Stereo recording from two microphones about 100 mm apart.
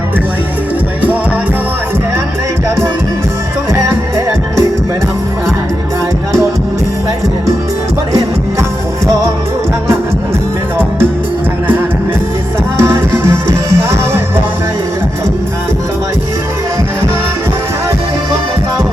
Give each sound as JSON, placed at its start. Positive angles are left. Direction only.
{"t": 2.6, "sound": "music", "side_deg": -30}
{"t": 12.8, "sound": "music", "side_deg": -25}